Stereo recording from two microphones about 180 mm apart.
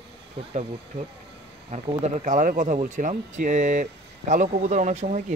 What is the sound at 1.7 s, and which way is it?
Speech, 35° right (ahead or behind).